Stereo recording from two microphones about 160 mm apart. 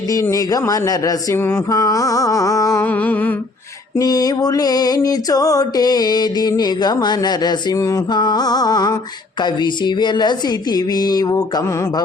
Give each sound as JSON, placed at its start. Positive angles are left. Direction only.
{"t": 0.1, "sound": "mantra", "side_deg": 20}
{"t": 3.9, "sound": "mantra", "side_deg": 25}